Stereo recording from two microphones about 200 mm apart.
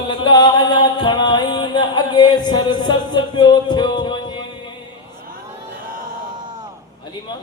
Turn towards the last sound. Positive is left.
turn(degrees=-20)  # may be behind; listen again after turning